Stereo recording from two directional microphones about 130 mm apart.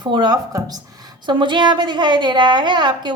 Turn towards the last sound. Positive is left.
turn(degrees=-35)  # may be behind; listen again after turning